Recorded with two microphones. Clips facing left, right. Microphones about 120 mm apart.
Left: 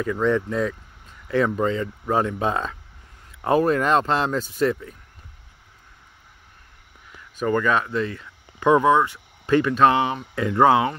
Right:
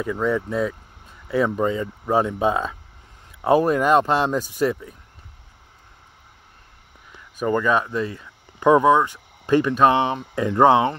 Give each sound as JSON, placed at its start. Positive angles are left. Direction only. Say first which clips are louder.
{"t": 0.0, "sound": "speech", "louder": "left 1 dB", "side_deg": -10}
{"t": 7.3, "sound": "speech", "louder": "right 1 dB", "side_deg": -15}